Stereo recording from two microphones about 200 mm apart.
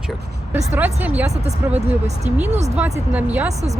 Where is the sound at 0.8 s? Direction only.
10° right (ahead or behind).